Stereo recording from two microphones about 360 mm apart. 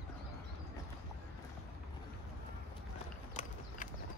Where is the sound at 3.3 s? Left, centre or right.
Centre.